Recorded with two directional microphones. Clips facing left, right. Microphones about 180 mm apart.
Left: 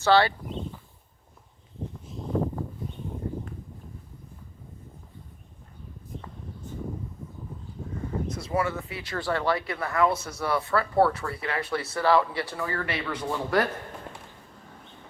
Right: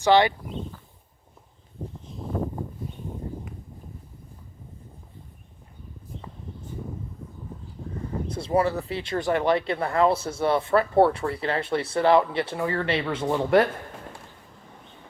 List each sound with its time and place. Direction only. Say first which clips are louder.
0.0 s speech: right 2 dB; 15° right (ahead or behind)
8.3 s speech: right 6 dB; 30° right (ahead or behind)